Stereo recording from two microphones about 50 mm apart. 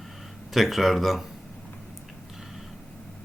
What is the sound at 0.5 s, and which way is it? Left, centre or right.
Speech, centre.